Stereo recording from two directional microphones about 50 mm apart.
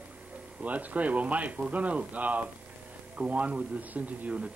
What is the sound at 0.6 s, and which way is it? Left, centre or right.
Speech, right.